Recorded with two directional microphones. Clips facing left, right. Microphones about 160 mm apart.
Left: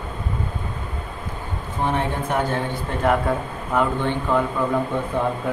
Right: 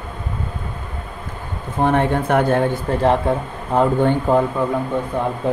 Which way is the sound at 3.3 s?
25° right (ahead or behind).